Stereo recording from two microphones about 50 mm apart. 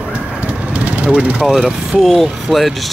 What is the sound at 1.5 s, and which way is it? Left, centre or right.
Speech, centre.